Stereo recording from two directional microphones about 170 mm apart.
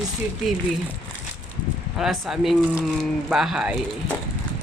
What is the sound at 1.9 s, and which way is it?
Speech, 5° right (ahead or behind).